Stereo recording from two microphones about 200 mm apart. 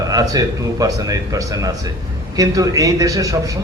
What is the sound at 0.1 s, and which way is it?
Speech, 20° right (ahead or behind).